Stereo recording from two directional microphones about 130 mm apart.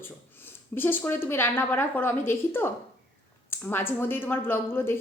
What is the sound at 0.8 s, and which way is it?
A woman's voice, 15° left (ahead or behind).